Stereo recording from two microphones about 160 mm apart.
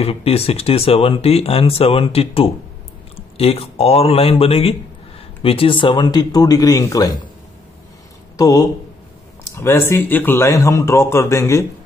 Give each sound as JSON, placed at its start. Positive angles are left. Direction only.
{"t": 0.0, "sound": "speech", "side_deg": 40}
{"t": 8.4, "sound": "speech", "side_deg": 25}